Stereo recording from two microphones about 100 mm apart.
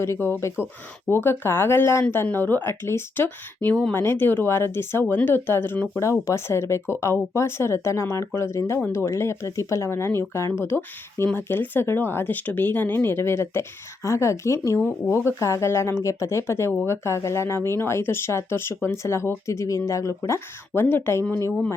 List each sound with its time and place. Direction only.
0.0 s speech: 30° left (ahead or behind)
14.8 s speech: 15° left (ahead or behind)
15.1 s speech: 25° left (ahead or behind)